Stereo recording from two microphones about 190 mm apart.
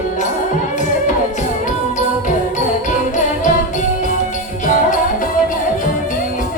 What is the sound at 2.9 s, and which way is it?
Music, 40° left (ahead or behind).